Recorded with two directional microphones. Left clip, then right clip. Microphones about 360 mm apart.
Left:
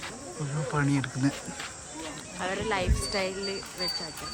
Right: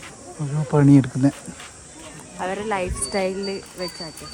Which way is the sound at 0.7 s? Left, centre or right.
Centre.